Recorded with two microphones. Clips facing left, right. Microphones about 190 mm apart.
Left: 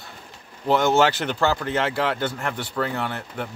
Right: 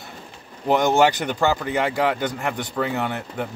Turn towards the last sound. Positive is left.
turn(degrees=-15)  # may be behind; listen again after turning